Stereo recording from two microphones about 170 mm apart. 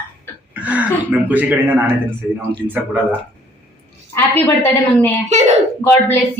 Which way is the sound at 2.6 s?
10° right (ahead or behind).